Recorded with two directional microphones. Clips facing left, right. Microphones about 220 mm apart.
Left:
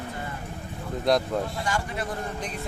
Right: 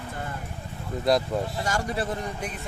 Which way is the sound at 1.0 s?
Centre (ahead or behind).